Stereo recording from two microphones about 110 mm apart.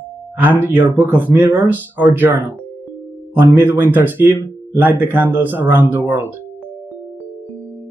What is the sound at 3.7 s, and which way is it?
Speech, 20° right (ahead or behind).